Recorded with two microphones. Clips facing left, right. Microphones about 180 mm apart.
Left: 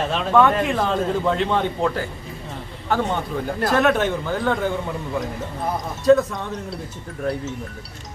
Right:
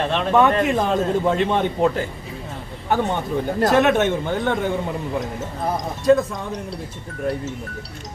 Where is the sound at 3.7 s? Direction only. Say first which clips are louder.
Right 2 dB; 20° right (ahead or behind).